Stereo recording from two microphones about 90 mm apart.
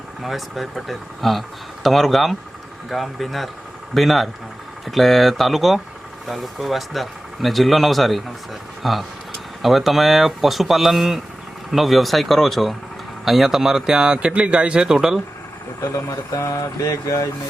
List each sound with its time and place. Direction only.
0.2 s speech: centre (ahead or behind)
15.8 s speech: 35° left (ahead or behind)